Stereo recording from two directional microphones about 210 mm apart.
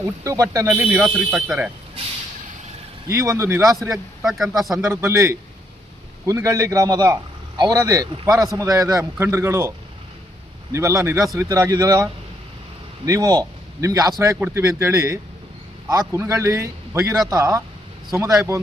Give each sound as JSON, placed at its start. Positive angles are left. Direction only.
{"t": 0.0, "sound": "a man's voice", "side_deg": -15}
{"t": 3.1, "sound": "a man's voice", "side_deg": -15}
{"t": 3.9, "sound": "a man's voice", "side_deg": 0}
{"t": 4.8, "sound": "a man's voice", "side_deg": -10}
{"t": 13.1, "sound": "a man's voice", "side_deg": -15}